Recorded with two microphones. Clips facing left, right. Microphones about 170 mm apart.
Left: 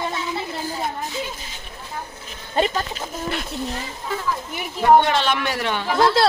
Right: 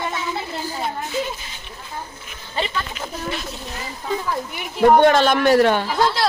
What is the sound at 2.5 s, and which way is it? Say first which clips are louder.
Speech: left 4 dB; 45° left (ahead or behind).